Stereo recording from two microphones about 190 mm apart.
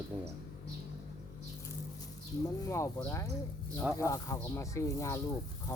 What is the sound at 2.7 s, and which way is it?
Speech, 15° left (ahead or behind).